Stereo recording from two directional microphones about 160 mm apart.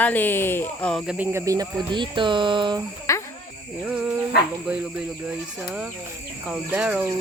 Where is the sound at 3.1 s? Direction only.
20° left (ahead or behind).